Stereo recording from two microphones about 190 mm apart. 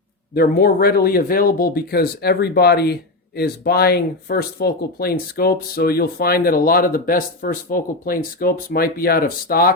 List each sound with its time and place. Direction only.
0.3 s speech: 55° left (ahead or behind)